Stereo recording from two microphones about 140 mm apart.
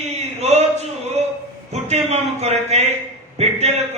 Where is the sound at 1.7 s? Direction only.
50° right (ahead or behind).